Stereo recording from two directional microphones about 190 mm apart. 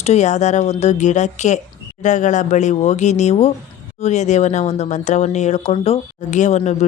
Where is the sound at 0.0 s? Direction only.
35° left (ahead or behind).